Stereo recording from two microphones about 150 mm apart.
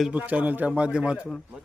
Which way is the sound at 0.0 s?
10° right (ahead or behind).